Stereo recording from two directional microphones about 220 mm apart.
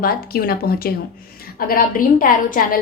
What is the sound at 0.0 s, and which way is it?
A woman's voice, 45° left (ahead or behind).